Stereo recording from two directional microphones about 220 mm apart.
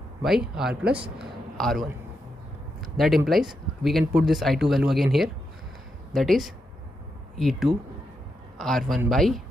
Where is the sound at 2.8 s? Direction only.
Centre (ahead or behind).